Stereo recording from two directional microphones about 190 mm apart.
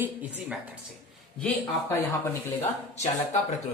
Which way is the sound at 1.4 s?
10° left (ahead or behind).